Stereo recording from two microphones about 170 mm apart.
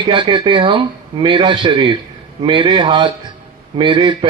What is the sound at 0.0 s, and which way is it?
A man's voice, 30° right (ahead or behind).